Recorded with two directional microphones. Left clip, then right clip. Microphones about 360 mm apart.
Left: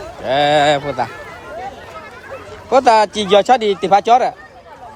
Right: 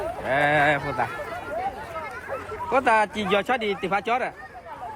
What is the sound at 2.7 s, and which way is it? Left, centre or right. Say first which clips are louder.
Speech: left 9 dB; centre.